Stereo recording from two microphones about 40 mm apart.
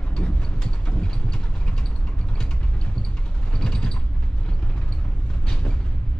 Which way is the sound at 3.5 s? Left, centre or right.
Centre.